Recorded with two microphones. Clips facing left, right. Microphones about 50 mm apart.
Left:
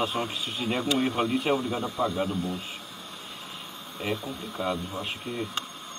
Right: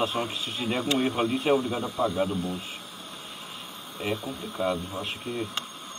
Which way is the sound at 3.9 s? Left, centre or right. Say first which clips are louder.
Right 1 dB; centre.